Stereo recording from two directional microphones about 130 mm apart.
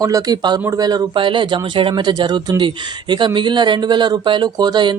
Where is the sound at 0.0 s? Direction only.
30° right (ahead or behind).